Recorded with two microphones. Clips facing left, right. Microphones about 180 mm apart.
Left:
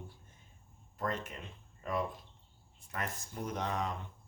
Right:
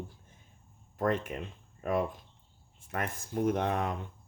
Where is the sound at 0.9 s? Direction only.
50° right (ahead or behind).